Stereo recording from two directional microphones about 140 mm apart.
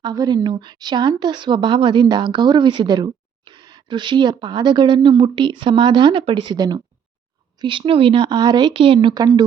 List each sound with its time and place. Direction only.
0.0 s a woman's voice: 30° right (ahead or behind)